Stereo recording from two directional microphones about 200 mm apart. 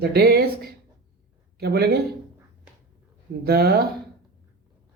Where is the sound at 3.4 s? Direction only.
50° right (ahead or behind).